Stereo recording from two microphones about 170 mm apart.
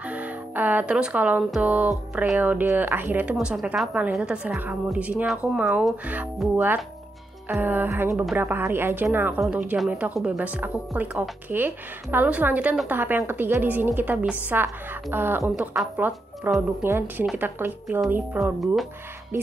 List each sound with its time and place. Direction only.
0.0 s speech: 10° right (ahead or behind)